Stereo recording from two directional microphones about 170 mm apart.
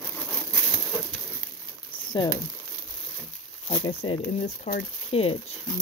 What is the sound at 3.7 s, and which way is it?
Speech, 35° left (ahead or behind).